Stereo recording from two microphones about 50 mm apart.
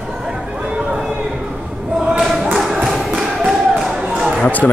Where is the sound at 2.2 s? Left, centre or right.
Centre.